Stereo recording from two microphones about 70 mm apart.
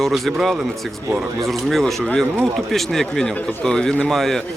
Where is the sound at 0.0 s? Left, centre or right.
Centre.